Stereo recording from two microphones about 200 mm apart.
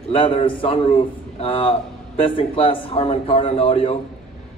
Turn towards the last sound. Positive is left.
turn(degrees=30)  # may be behind; listen again after turning